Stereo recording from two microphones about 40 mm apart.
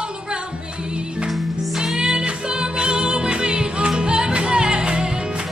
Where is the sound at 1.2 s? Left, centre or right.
Centre.